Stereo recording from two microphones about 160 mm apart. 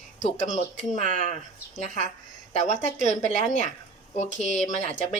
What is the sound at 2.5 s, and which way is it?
A woman's voice, 45° left (ahead or behind).